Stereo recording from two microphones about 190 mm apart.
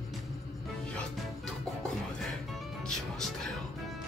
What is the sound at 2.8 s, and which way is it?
Music, 5° left (ahead or behind).